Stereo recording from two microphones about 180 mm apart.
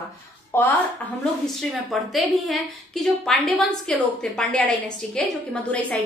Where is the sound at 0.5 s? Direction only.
15° left (ahead or behind).